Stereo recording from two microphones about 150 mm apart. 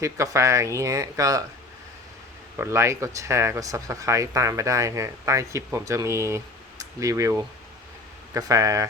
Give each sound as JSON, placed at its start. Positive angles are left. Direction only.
{"t": 0.0, "sound": "speech", "side_deg": -20}
{"t": 2.6, "sound": "speech", "side_deg": -20}